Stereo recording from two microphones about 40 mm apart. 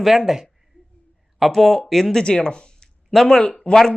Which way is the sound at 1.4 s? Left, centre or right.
Centre.